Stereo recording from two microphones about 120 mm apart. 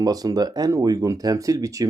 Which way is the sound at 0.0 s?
30° right (ahead or behind).